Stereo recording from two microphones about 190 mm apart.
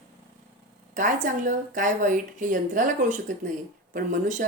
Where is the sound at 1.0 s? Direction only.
40° right (ahead or behind).